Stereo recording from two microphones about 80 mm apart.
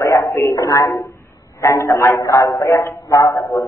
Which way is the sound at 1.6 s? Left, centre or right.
Left.